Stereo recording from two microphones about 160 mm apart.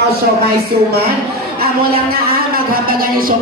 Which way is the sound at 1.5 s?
70° right (ahead or behind).